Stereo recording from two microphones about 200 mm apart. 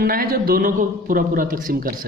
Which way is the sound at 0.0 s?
45° right (ahead or behind).